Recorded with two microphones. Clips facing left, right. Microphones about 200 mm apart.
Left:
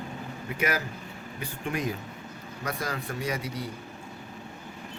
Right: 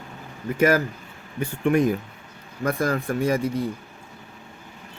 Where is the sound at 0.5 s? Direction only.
50° right (ahead or behind).